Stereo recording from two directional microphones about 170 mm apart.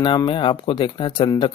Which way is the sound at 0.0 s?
30° left (ahead or behind).